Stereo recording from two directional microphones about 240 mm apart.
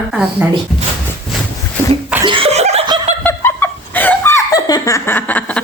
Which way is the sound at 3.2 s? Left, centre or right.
Centre.